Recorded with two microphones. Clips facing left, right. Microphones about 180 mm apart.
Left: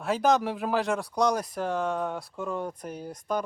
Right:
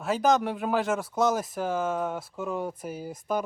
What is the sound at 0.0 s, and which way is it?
Speech, centre (ahead or behind).